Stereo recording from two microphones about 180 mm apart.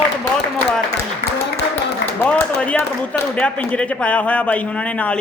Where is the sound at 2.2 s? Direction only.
10° left (ahead or behind).